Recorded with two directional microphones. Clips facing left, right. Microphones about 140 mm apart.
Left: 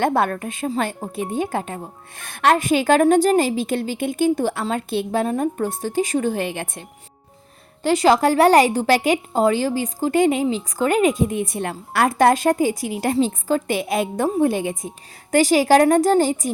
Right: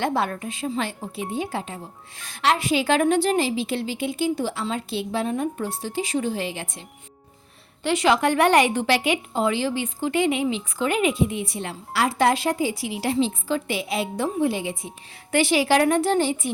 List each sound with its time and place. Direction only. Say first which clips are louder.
0.0 s speech: left 5 dB; 50° left (ahead or behind)
7.8 s speech: left 4 dB; 40° left (ahead or behind)